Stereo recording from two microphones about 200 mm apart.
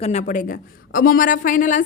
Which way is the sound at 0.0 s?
35° left (ahead or behind).